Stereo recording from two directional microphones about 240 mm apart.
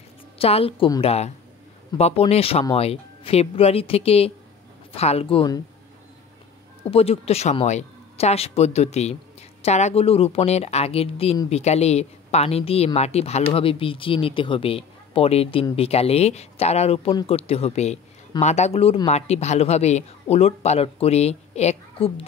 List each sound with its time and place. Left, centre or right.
0.4 s a woman's voice: left
6.8 s a woman's voice: left